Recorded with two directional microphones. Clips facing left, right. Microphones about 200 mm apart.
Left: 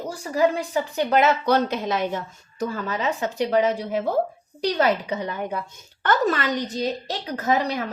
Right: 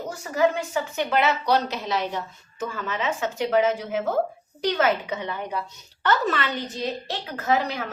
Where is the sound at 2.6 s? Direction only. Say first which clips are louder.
Left 3 dB; 40° left (ahead or behind).